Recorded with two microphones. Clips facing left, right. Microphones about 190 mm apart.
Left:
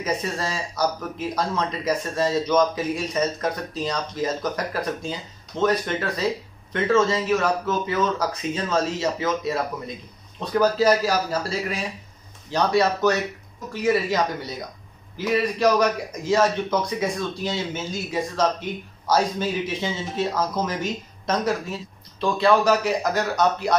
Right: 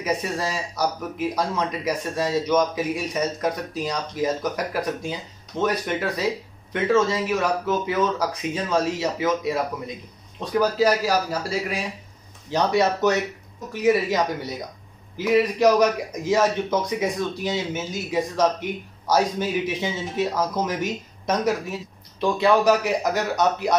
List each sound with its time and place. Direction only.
0.0 s a man's voice: 15° right (ahead or behind)
12.4 s a man's voice: 20° right (ahead or behind)